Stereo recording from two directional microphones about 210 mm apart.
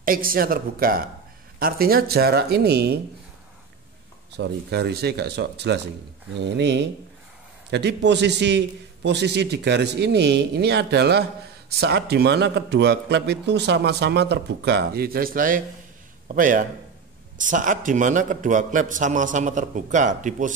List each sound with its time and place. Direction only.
0.0 s a man's voice: 45° right (ahead or behind)
4.3 s a man's voice: 50° right (ahead or behind); by 20.5 s 35° right (ahead or behind)